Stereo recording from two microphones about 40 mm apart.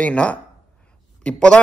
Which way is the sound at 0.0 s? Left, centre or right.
Left.